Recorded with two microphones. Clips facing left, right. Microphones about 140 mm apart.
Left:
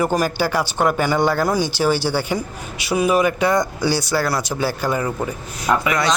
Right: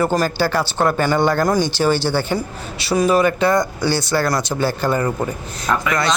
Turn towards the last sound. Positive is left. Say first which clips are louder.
# even
turn(degrees=10)  # may be behind; listen again after turning